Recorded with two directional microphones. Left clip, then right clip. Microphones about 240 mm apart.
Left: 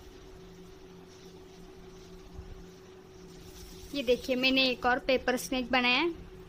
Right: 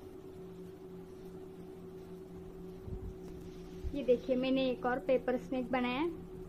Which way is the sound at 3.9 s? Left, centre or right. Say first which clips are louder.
Left 2 dB; left.